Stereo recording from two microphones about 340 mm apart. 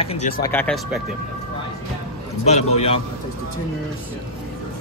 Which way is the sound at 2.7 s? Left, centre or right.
Centre.